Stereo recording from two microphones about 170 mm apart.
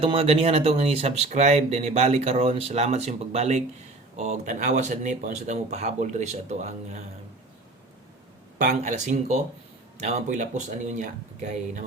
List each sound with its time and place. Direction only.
0.0 s speech: 35° right (ahead or behind)
8.5 s speech: 50° right (ahead or behind)